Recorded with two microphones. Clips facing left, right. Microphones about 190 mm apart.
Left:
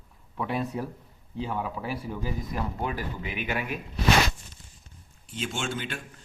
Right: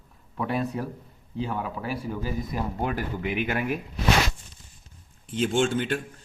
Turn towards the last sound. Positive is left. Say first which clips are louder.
# right 9 dB
turn(degrees=-50)  # may be behind; listen again after turning